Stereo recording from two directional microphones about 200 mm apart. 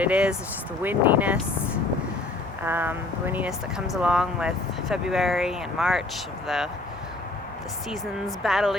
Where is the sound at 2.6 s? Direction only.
10° right (ahead or behind).